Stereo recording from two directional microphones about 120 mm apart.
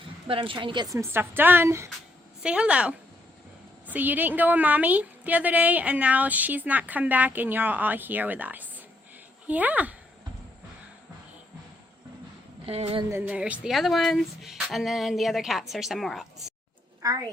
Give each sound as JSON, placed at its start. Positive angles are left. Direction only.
{"t": 0.3, "sound": "speech", "side_deg": -45}
{"t": 0.9, "sound": "a woman's voice", "side_deg": -25}
{"t": 2.4, "sound": "a woman's voice", "side_deg": -10}
{"t": 12.6, "sound": "a woman's voice", "side_deg": -55}
{"t": 13.1, "sound": "speech", "side_deg": -15}
{"t": 17.0, "sound": "a woman's voice", "side_deg": -30}